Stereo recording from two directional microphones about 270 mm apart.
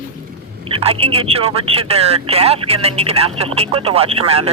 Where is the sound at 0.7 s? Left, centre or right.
Right.